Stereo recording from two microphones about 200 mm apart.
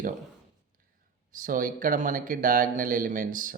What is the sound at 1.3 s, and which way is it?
Speech, 45° right (ahead or behind).